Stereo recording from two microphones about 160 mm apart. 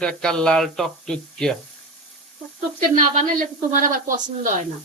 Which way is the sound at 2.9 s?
50° right (ahead or behind).